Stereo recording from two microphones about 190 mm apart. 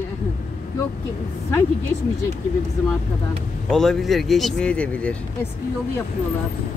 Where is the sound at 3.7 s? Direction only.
Centre (ahead or behind).